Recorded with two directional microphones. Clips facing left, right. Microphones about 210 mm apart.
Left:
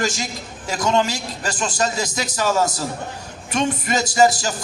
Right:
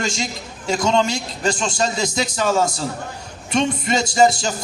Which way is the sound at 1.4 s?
25° right (ahead or behind).